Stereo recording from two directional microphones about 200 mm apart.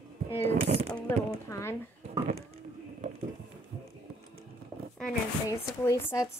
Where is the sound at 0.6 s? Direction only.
30° right (ahead or behind).